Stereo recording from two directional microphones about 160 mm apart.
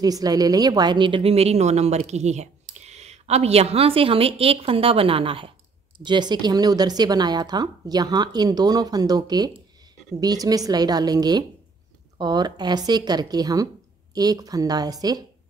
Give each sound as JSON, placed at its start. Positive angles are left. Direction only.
{"t": 0.0, "sound": "a woman's voice", "side_deg": -25}